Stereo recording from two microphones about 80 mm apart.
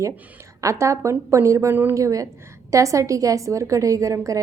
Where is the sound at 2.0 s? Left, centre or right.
Right.